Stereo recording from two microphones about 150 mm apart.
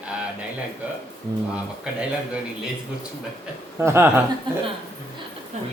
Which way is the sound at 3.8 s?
15° right (ahead or behind).